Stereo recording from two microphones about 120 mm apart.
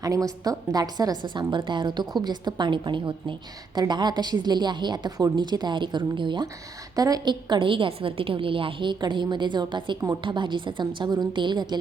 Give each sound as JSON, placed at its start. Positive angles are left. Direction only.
{"t": 0.0, "sound": "a woman's voice", "side_deg": -30}